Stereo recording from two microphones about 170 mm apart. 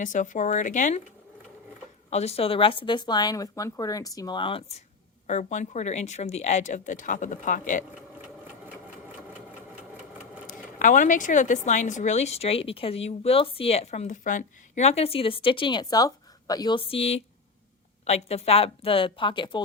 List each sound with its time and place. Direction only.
0.0 s speech: 50° left (ahead or behind)
2.0 s speech: 35° left (ahead or behind)
5.2 s speech: 45° left (ahead or behind)
10.4 s speech: 50° left (ahead or behind); by 19.6 s 30° left (ahead or behind)